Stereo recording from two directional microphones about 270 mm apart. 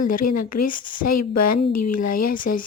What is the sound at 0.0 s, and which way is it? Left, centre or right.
Speech, left.